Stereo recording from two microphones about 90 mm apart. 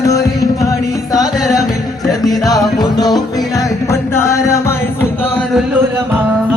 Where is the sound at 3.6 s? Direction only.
35° left (ahead or behind).